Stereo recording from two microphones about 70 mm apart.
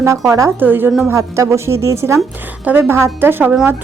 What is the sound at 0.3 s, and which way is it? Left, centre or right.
Speech, right.